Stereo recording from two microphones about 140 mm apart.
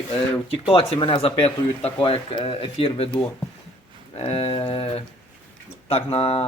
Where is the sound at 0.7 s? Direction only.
40° left (ahead or behind).